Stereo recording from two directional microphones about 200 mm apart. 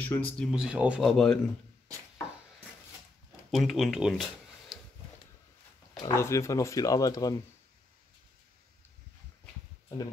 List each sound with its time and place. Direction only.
0.0 s speech: 10° left (ahead or behind)
0.5 s speech: 5° right (ahead or behind)
3.5 s speech: centre (ahead or behind)
5.9 s speech: 15° left (ahead or behind)